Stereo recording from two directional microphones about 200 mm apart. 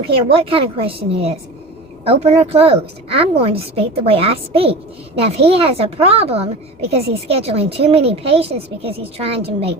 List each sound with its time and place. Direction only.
0.3 s a woman's voice: 30° right (ahead or behind)